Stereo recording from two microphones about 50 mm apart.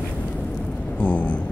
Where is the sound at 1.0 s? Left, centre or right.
Left.